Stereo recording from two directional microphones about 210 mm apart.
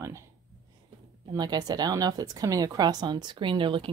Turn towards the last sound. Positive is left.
turn(degrees=-25)  # may be behind; listen again after turning